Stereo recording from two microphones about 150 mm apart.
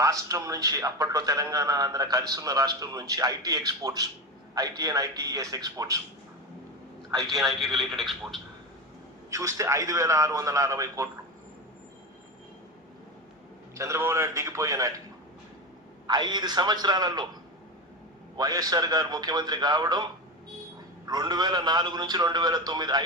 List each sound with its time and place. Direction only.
0.0 s a man's voice: 20° right (ahead or behind)
7.3 s speech: centre (ahead or behind)
9.3 s a man's voice: 20° right (ahead or behind)
13.7 s a man's voice: 20° right (ahead or behind)
16.0 s a man's voice: 30° right (ahead or behind)
18.3 s a man's voice: 25° right (ahead or behind)
21.1 s a man's voice: 25° right (ahead or behind)